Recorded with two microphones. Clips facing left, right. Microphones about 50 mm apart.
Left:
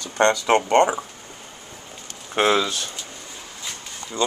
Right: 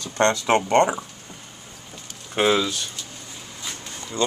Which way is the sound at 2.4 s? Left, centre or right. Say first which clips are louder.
Left 1 dB; centre.